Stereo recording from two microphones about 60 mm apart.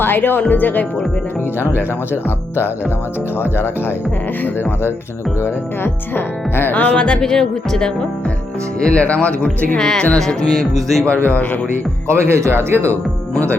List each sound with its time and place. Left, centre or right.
0.0 s speech: left
3.4 s speech: left
5.4 s speech: left
6.7 s speech: left
10.2 s music: centre
11.1 s speech: left
12.0 s speech: right